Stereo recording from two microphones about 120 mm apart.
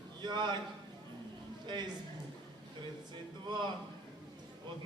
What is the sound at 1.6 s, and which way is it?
Speech, 35° right (ahead or behind).